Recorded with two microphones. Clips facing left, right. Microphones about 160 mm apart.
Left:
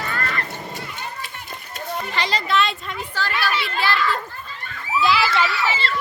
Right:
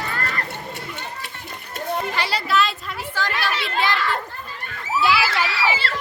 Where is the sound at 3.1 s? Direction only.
20° right (ahead or behind).